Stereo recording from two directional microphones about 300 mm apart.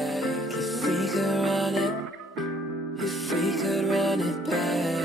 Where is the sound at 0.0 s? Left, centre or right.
Centre.